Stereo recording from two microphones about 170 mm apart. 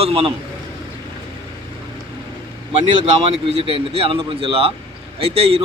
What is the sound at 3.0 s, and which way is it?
Speech, 35° right (ahead or behind).